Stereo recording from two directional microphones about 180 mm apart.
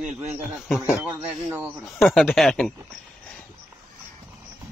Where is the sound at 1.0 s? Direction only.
10° right (ahead or behind).